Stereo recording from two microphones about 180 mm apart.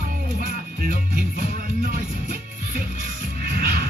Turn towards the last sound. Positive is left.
turn(degrees=-60)  # may be behind; listen again after turning